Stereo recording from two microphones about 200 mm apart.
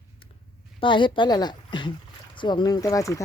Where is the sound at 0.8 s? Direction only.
25° left (ahead or behind).